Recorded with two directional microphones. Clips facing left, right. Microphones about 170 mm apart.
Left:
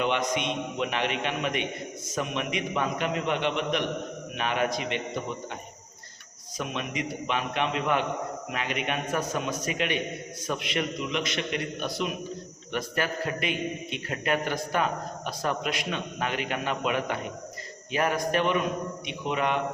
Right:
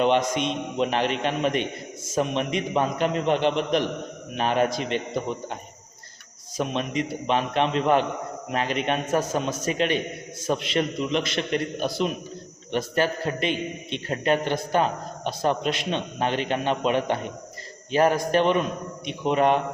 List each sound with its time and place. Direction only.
0.0 s a man's voice: 35° right (ahead or behind)
6.6 s a man's voice: 35° right (ahead or behind)